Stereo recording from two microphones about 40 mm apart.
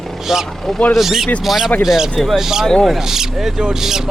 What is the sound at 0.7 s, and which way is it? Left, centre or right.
Speech, centre.